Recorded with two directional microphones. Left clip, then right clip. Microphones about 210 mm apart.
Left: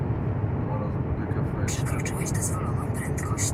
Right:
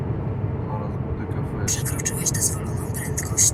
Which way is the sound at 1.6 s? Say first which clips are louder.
Right 3 dB; 60° right (ahead or behind).